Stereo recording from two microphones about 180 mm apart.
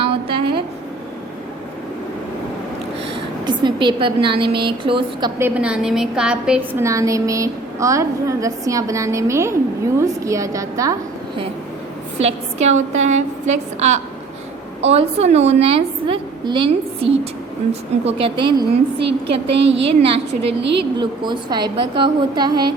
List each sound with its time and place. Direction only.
0.0 s a sound: 30° right (ahead or behind)
3.4 s a woman's voice: 25° right (ahead or behind)
5.4 s a woman's voice: 5° right (ahead or behind)
6.8 s a woman's voice: 15° right (ahead or behind)
12.2 s a woman's voice: 40° right (ahead or behind)
19.5 s a woman's voice: 80° right
20.0 s a woman's voice: 30° right (ahead or behind)
20.6 s a woman's voice: 75° right (ahead or behind)
21.0 s a woman's voice: 25° right (ahead or behind)